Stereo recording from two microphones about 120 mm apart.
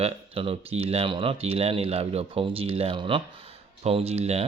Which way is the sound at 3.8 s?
60° right (ahead or behind).